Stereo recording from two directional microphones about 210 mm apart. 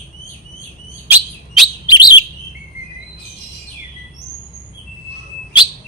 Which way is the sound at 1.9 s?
20° left (ahead or behind).